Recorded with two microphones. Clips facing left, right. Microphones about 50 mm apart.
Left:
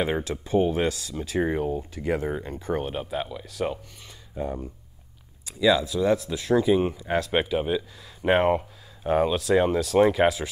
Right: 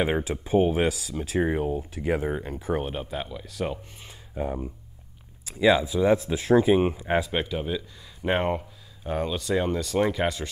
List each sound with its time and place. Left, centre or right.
0.0 s speech: centre
4.4 s speech: centre
5.6 s speech: right
7.3 s speech: centre
8.3 s speech: centre